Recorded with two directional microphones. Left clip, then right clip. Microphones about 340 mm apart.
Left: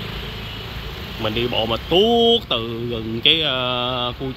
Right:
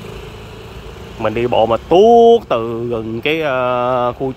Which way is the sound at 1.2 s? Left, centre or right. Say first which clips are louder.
Right 7 dB; centre.